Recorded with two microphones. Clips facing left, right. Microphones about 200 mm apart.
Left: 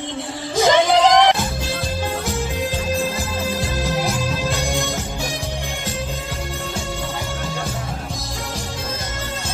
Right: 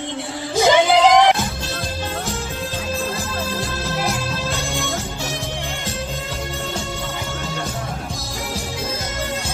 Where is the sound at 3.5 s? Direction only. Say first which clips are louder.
Left 3 dB; 15° left (ahead or behind).